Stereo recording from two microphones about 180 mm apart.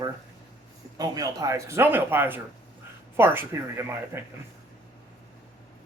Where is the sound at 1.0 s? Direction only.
20° right (ahead or behind).